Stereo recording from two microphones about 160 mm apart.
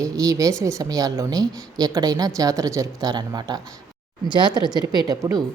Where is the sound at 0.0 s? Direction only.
20° right (ahead or behind).